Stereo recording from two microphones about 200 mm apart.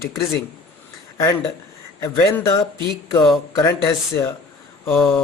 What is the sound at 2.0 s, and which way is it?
Speech, 15° left (ahead or behind).